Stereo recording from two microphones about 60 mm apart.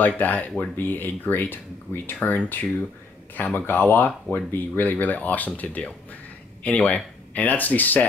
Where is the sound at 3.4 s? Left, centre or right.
Left.